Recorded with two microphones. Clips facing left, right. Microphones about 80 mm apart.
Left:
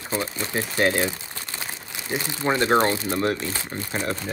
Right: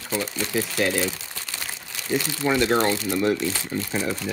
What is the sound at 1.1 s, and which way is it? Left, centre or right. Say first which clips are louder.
Crumpling: even; left.